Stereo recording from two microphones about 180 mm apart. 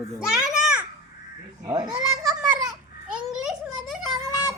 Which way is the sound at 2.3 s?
10° right (ahead or behind).